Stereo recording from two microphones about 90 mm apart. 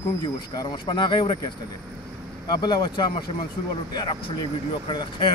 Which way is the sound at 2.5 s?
55° left (ahead or behind).